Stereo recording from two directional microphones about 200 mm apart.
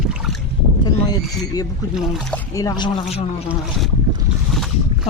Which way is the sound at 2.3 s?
15° left (ahead or behind).